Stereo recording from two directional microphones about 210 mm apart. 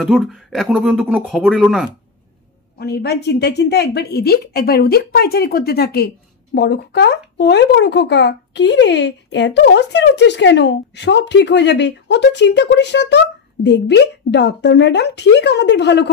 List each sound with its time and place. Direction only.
0.0 s speech: centre (ahead or behind)
2.8 s a woman's voice: 50° left (ahead or behind)